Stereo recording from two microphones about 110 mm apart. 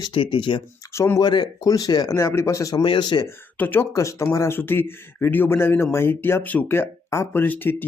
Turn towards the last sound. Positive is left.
turn(degrees=20)  # may be behind; listen again after turning